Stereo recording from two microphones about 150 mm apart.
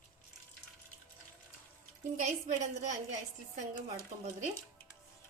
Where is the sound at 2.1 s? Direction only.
50° right (ahead or behind).